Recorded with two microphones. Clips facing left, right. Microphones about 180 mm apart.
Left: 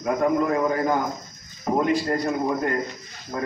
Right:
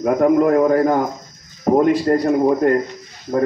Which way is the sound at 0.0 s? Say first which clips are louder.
Right 7 dB; 55° right (ahead or behind).